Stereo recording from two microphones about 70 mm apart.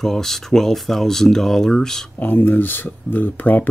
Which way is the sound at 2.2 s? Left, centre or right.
Left.